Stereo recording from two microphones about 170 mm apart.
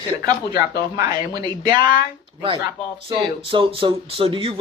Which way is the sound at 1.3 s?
25° right (ahead or behind).